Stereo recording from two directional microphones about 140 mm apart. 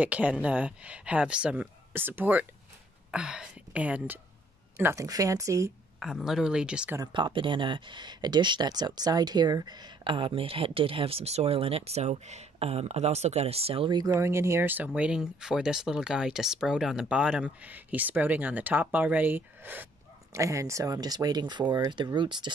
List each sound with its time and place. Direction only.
0.0 s speech: 10° right (ahead or behind)
5.9 s speech: 5° right (ahead or behind)
7.0 s speech: 35° right (ahead or behind)